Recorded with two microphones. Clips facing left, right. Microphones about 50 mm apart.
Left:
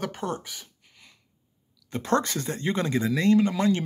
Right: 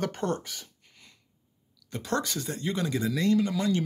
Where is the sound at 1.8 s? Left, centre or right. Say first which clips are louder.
Left 5 dB; left.